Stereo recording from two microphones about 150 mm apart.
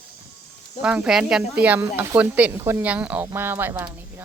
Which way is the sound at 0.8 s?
5° right (ahead or behind).